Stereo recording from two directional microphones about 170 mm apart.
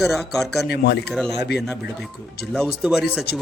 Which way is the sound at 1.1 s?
5° left (ahead or behind).